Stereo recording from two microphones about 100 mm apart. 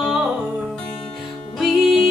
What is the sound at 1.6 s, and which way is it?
Music, centre (ahead or behind).